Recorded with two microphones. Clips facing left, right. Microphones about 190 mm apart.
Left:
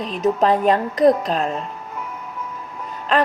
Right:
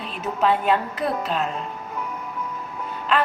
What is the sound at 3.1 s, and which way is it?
Speech, 40° left (ahead or behind).